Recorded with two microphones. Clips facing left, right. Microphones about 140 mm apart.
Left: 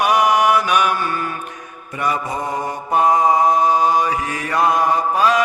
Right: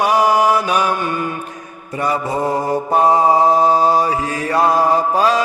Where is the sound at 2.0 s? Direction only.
30° right (ahead or behind).